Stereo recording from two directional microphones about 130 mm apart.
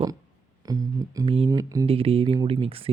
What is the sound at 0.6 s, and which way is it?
Music, 30° right (ahead or behind).